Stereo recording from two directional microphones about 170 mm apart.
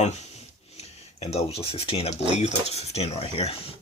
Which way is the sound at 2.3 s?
40° left (ahead or behind).